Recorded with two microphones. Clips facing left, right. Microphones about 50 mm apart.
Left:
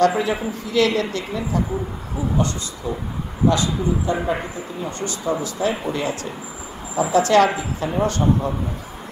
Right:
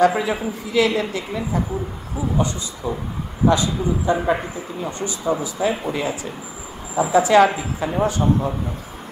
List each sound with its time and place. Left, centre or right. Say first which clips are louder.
0.0 s a woman's voice: right 1 dB; centre
3.4 s a woman's voice: right 1 dB; right; by 8.5 s centre